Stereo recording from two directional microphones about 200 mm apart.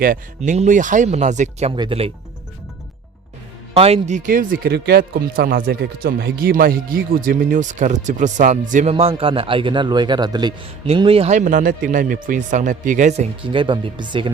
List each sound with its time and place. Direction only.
0.0 s speech: 40° right (ahead or behind)
3.8 s speech: 30° right (ahead or behind)